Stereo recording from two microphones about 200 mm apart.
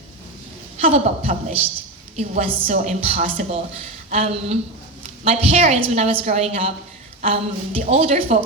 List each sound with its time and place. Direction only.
0.8 s a woman's voice: 30° right (ahead or behind)